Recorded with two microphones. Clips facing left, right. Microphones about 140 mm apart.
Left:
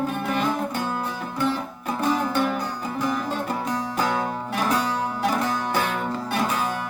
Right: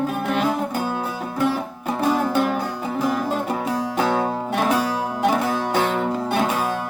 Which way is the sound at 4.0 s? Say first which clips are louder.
Right 5 dB; 25° right (ahead or behind).